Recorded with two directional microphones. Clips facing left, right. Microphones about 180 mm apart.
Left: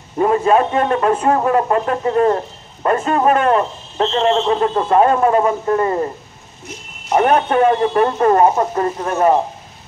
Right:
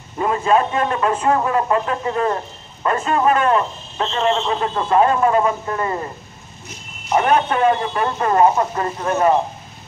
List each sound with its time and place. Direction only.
0.2 s a man's voice: 50° left (ahead or behind)
7.1 s a man's voice: 45° left (ahead or behind)